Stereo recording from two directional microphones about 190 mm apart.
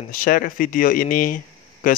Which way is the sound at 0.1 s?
45° left (ahead or behind).